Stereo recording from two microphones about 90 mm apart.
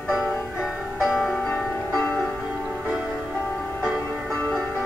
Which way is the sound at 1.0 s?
Centre (ahead or behind).